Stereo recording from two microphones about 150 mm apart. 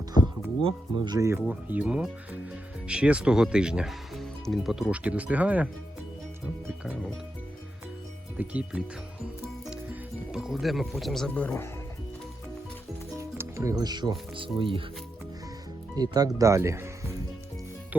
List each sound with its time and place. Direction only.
0.6 s speech: 30° right (ahead or behind); by 5.6 s 10° right (ahead or behind)
6.8 s speech: 5° right (ahead or behind)
8.4 s speech: 10° right (ahead or behind); by 11.7 s 15° left (ahead or behind)
13.1 s music: 15° right (ahead or behind)
14.3 s speech: 35° right (ahead or behind)
16.0 s speech: 25° right (ahead or behind)